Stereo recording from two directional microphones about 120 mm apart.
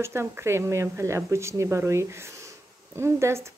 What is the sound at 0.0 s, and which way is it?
Speech, 20° right (ahead or behind).